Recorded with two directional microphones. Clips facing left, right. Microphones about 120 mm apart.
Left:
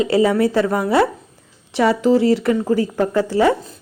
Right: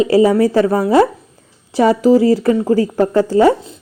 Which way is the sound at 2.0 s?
40° right (ahead or behind).